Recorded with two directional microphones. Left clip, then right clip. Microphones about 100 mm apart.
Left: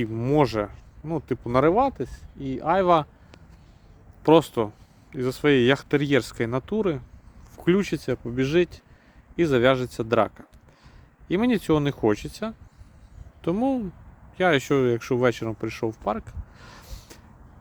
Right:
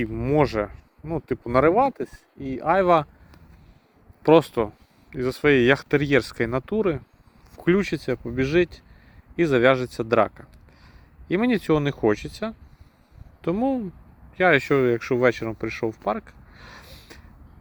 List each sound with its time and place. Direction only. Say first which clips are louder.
0.0 s speech: even; 20° left (ahead or behind)
1.5 s speech: right 2 dB; centre (ahead or behind)
4.2 s speech: right 1 dB; 20° left (ahead or behind)